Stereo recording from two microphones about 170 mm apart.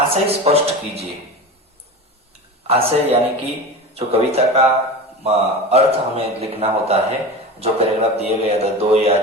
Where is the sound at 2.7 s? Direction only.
35° right (ahead or behind).